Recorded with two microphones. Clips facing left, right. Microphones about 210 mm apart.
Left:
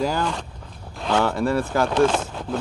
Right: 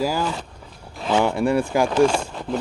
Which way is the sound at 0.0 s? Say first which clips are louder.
Even; 5° right (ahead or behind).